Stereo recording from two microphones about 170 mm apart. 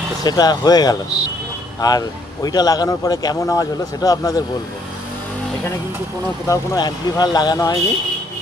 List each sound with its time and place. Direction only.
0.2 s speech: 25° left (ahead or behind)
6.4 s speech: 20° left (ahead or behind)